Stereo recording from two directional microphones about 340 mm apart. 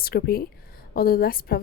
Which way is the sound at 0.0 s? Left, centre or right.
Left.